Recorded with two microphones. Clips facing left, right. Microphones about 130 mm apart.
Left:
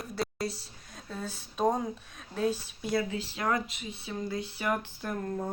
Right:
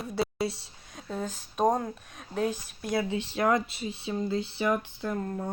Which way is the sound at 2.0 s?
5° right (ahead or behind).